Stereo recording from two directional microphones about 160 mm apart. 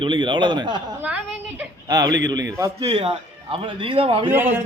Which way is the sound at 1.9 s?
20° right (ahead or behind).